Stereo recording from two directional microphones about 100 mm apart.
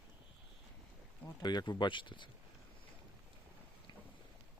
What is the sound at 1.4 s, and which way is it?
Speech, 45° left (ahead or behind).